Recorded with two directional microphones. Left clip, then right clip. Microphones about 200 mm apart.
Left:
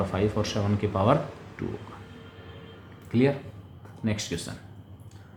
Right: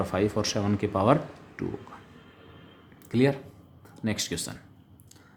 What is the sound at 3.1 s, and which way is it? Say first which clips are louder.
Speech: even; 45° right (ahead or behind).